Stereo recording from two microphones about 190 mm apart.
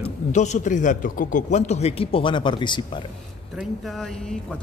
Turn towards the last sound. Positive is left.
turn(degrees=5)  # may be behind; listen again after turning